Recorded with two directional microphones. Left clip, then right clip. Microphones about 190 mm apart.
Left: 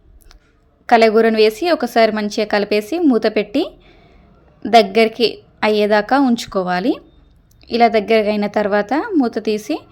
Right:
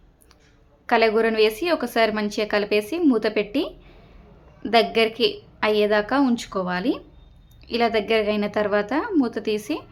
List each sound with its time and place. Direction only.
0.9 s a woman's voice: 30° left (ahead or behind)